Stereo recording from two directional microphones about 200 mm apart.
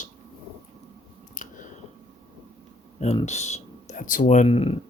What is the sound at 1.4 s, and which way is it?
Chewing, 40° left (ahead or behind).